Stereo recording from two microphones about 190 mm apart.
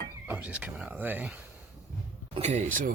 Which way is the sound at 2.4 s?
35° right (ahead or behind).